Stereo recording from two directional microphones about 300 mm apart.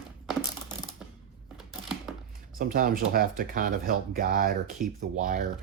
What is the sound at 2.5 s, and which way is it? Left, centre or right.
Speech, right.